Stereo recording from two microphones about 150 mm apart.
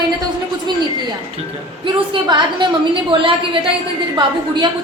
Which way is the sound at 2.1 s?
30° right (ahead or behind).